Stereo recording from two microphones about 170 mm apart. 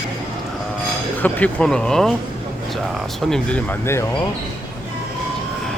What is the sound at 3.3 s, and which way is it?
Speech, 10° left (ahead or behind).